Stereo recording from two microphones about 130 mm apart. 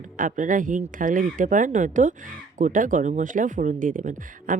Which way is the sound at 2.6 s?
90° right.